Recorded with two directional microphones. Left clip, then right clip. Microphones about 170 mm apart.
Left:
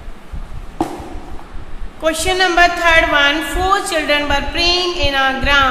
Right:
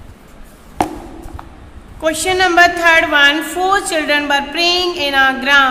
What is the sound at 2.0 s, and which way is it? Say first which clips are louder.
A woman's voice: right 1 dB; 20° right (ahead or behind).